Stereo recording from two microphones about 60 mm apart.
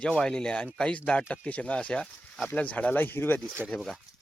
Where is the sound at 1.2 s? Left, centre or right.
Left.